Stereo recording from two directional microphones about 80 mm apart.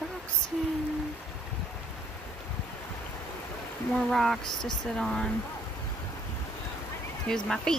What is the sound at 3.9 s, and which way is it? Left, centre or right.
Speech, centre.